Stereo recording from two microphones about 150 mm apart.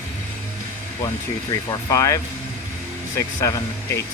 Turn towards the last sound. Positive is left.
turn(degrees=20)  # may be behind; listen again after turning